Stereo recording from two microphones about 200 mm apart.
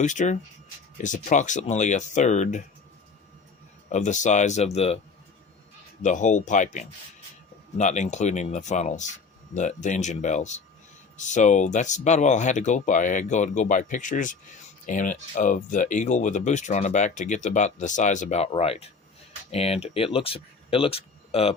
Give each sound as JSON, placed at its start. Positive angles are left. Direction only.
{"t": 0.0, "sound": "speech", "side_deg": 40}
{"t": 3.8, "sound": "speech", "side_deg": 35}
{"t": 6.0, "sound": "speech", "side_deg": 40}